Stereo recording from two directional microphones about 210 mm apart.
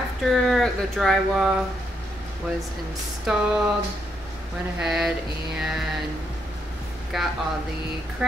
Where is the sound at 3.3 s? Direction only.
Centre (ahead or behind).